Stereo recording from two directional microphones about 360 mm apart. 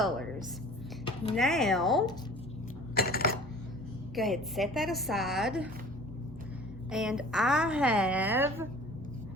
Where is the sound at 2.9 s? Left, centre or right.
Left.